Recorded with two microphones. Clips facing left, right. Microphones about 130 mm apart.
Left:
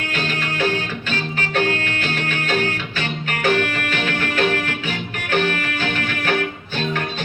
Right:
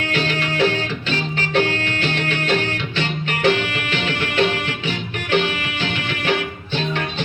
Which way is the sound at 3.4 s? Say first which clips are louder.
Even; 45° left (ahead or behind).